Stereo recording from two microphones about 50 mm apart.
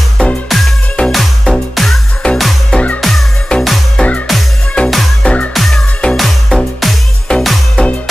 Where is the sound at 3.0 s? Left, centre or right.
Centre.